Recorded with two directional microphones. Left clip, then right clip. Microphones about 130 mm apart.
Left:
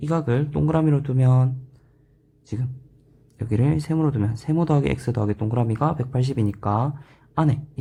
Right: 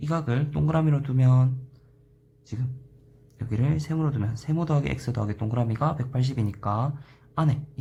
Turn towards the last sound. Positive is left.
turn(degrees=25)  # may be behind; listen again after turning